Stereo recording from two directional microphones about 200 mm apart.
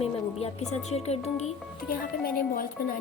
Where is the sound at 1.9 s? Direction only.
45° left (ahead or behind).